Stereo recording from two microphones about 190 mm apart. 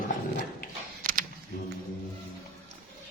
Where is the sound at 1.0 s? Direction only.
45° right (ahead or behind).